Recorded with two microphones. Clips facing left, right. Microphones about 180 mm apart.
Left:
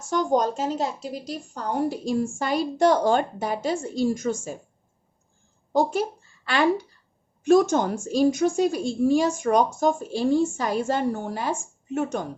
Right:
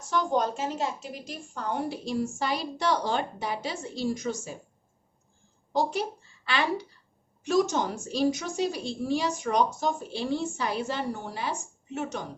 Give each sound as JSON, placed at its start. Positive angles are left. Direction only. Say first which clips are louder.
{"t": 0.0, "sound": "a woman's voice", "louder": "left 4 dB", "side_deg": 45}
{"t": 5.7, "sound": "a woman's voice", "louder": "left 5 dB", "side_deg": 50}